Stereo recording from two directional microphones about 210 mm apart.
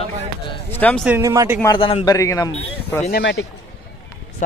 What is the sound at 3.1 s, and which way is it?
Speech, 55° left (ahead or behind).